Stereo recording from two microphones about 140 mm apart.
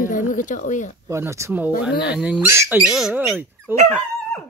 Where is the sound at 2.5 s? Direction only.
20° right (ahead or behind).